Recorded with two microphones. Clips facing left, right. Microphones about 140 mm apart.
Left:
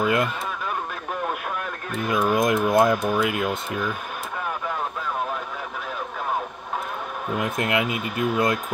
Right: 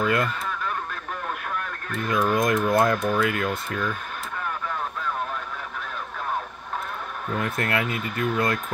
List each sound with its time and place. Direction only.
0.0 s honk: 15° left (ahead or behind)
1.9 s speech: 15° left (ahead or behind)
7.2 s speech: 15° left (ahead or behind)